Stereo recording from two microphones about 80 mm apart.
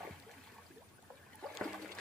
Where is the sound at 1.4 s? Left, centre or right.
Centre.